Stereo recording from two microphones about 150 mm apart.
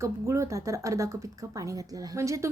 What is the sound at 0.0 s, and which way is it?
Speech, 20° right (ahead or behind).